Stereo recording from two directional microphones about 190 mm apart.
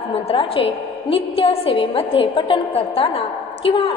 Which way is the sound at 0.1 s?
30° left (ahead or behind).